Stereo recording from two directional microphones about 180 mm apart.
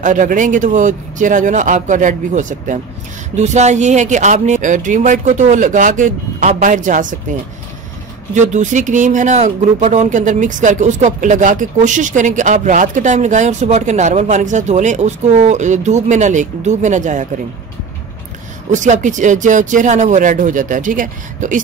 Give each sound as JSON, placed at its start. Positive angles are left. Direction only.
{"t": 0.0, "sound": "speech", "side_deg": -45}
{"t": 8.4, "sound": "speech", "side_deg": -40}
{"t": 18.7, "sound": "speech", "side_deg": -40}